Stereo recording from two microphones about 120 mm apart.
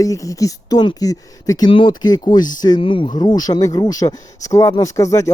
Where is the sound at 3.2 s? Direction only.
35° left (ahead or behind).